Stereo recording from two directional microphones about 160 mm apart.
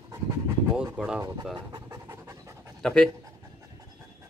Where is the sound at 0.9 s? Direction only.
5° right (ahead or behind).